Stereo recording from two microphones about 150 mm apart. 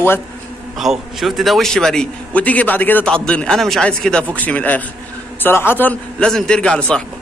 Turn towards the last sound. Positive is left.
turn(degrees=5)  # may be behind; listen again after turning